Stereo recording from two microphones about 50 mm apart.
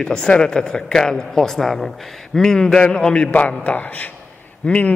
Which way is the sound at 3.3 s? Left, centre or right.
Left.